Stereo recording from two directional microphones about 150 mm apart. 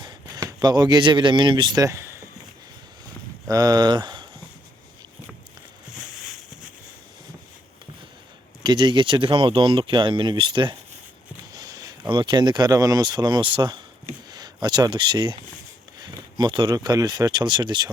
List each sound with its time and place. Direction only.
0.0 s speech: 25° right (ahead or behind)
3.5 s speech: 25° right (ahead or behind)
8.6 s speech: 30° right (ahead or behind)